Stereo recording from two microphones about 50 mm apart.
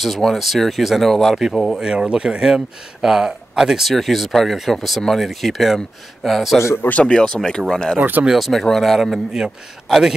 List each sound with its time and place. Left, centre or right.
0.0 s speech: centre
1.8 s speech: centre
3.9 s speech: centre
7.1 s speech: centre
8.0 s speech: right
8.3 s speech: centre
9.3 s speech: centre